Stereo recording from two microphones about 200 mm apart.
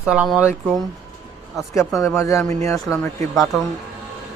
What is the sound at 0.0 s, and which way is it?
Speech, 5° right (ahead or behind).